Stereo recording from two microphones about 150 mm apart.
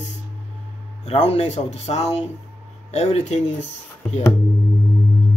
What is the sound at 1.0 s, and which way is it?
Speech, 45° left (ahead or behind).